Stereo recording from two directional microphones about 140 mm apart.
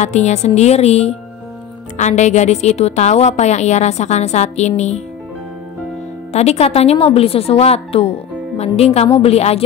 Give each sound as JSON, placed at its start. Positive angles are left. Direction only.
{"t": 0.0, "sound": "a woman's voice", "side_deg": 55}
{"t": 6.3, "sound": "a woman's voice", "side_deg": 50}